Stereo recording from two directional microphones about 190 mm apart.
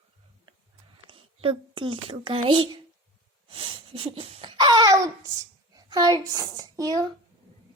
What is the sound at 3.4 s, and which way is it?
Laughter, 25° right (ahead or behind).